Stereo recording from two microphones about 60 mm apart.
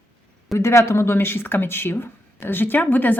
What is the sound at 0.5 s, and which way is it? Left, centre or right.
Speech, left.